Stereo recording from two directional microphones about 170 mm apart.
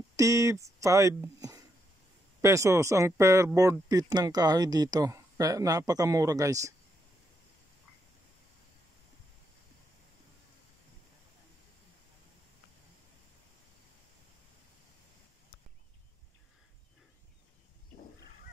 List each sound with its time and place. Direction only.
0.1 s speech: 20° right (ahead or behind)